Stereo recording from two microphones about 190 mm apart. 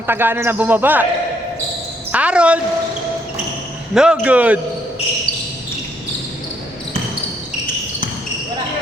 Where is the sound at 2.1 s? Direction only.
5° right (ahead or behind).